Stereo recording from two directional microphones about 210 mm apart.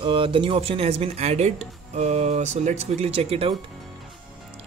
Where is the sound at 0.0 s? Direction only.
25° right (ahead or behind).